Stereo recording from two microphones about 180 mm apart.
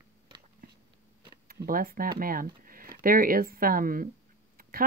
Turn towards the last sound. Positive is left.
turn(degrees=-50)  # may be behind; listen again after turning